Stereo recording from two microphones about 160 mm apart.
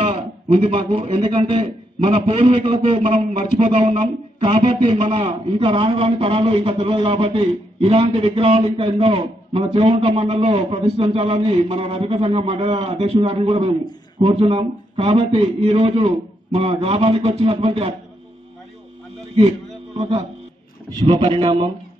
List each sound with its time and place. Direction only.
0.0 s a man's voice: 35° right (ahead or behind)
20.0 s a man's voice: 40° right (ahead or behind)
21.1 s a man's voice: 30° right (ahead or behind)